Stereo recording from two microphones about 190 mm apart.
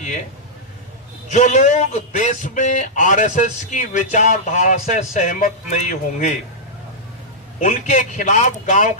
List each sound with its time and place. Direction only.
1.3 s a man's voice: 40° left (ahead or behind)
7.6 s a man's voice: 40° left (ahead or behind)